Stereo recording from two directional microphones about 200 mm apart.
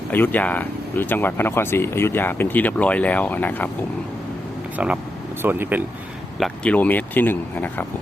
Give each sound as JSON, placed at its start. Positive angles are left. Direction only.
{"t": 0.1, "sound": "speech", "side_deg": 10}
{"t": 5.4, "sound": "speech", "side_deg": -10}
{"t": 6.4, "sound": "speech", "side_deg": 5}